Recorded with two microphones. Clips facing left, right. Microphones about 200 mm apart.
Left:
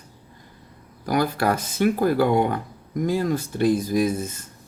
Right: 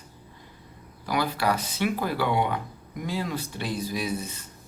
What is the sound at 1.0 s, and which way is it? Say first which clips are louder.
Speech: left 4 dB; 45° left (ahead or behind).